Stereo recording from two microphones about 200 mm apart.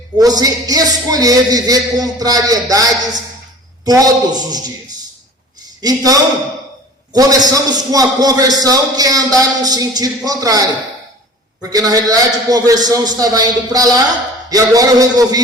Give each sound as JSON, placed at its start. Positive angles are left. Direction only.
{"t": 0.2, "sound": "a man's voice", "side_deg": -20}
{"t": 5.8, "sound": "a man's voice", "side_deg": -20}
{"t": 11.7, "sound": "a man's voice", "side_deg": -20}